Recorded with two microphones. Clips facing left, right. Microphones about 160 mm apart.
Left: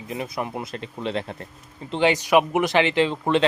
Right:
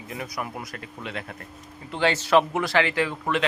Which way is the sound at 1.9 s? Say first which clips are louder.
Left 2 dB; 15° left (ahead or behind).